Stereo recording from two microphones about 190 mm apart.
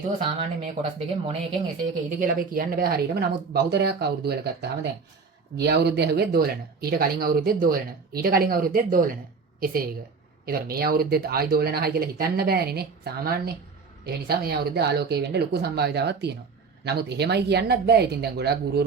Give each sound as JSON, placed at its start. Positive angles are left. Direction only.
{"t": 0.6, "sound": "speech", "side_deg": -30}
{"t": 2.0, "sound": "speech", "side_deg": -50}
{"t": 10.4, "sound": "speech", "side_deg": -55}